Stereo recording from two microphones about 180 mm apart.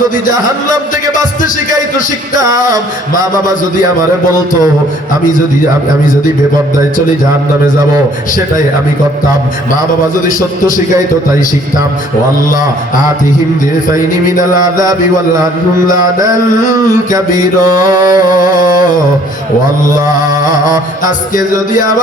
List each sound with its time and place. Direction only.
17.8 s music: 20° right (ahead or behind)